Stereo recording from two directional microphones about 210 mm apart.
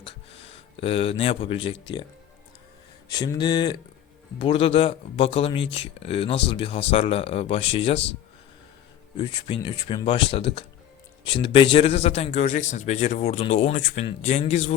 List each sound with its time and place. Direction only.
0.0 s speech: 30° left (ahead or behind)
3.1 s speech: 20° left (ahead or behind)
9.1 s a man's voice: 20° left (ahead or behind)